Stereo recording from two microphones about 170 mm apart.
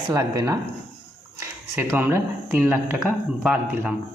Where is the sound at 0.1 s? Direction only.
20° right (ahead or behind).